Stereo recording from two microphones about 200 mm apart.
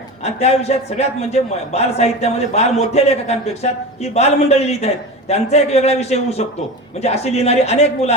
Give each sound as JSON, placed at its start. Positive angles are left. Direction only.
{"t": 0.2, "sound": "a man's voice", "side_deg": 30}